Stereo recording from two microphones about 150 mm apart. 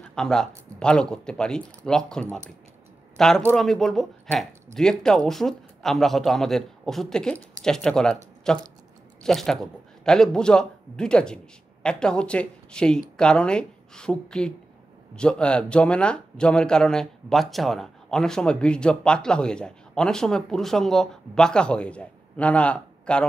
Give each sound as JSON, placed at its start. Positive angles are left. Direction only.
{"t": 0.1, "sound": "speech", "side_deg": 5}